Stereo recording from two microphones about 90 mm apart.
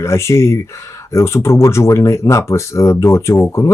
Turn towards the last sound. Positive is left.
turn(degrees=30)  # may be behind; listen again after turning